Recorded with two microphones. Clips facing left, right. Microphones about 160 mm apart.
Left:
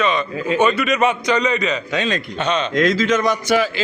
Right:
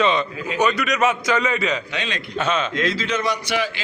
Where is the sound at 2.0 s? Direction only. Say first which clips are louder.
Left 7 dB; 45° left (ahead or behind).